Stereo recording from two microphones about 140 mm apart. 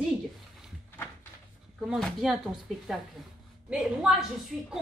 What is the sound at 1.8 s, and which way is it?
A woman's voice, centre (ahead or behind).